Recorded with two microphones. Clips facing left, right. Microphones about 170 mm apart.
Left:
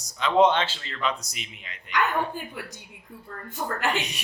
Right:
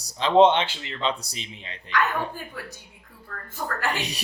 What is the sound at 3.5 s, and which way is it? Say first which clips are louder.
Speech: left 1 dB; 20° left (ahead or behind).